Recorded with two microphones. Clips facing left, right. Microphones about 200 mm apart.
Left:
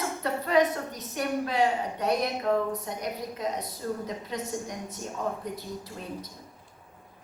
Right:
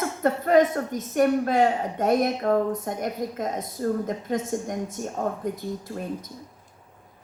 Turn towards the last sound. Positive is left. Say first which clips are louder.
# right 5 dB
turn(degrees=-50)  # may be behind; listen again after turning